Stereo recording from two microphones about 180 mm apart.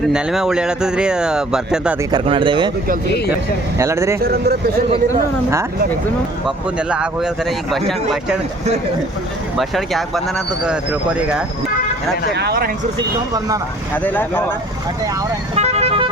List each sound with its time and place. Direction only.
0.1 s speech: 5° right (ahead or behind)
2.1 s speech: 30° right (ahead or behind)
3.8 s speech: 15° right (ahead or behind)
4.2 s speech: 60° right (ahead or behind)
6.7 s speech: 5° right (ahead or behind)
9.6 s speech: centre (ahead or behind)
12.3 s speech: 65° right (ahead or behind)
13.9 s speech: 10° left (ahead or behind)
15.5 s vehicle: 35° right (ahead or behind)